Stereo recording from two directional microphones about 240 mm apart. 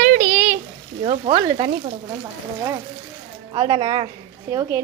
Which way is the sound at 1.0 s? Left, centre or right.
Right.